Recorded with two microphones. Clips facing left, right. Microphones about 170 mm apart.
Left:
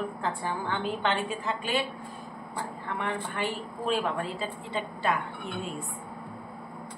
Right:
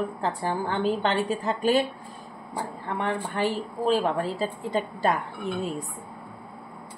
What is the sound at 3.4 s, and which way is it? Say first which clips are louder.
A woman's voice: right 6 dB; 40° right (ahead or behind).